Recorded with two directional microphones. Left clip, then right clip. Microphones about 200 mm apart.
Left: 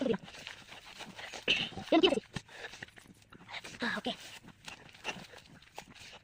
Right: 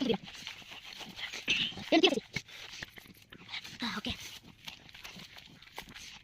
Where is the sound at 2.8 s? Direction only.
35° right (ahead or behind).